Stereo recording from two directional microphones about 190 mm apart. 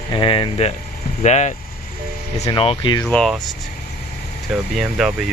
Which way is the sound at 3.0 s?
5° left (ahead or behind).